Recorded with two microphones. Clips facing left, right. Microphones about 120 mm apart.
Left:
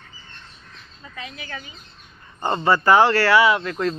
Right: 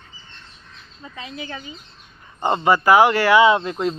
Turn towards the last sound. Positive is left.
turn(degrees=-20)  # may be behind; listen again after turning